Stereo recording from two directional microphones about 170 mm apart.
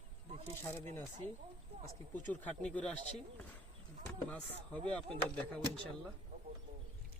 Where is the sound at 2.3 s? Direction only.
10° left (ahead or behind).